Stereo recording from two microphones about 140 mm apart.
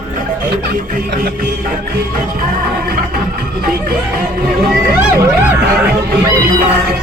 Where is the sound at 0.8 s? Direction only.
85° right.